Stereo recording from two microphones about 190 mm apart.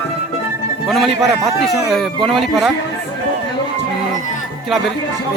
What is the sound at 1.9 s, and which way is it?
Speech, centre (ahead or behind).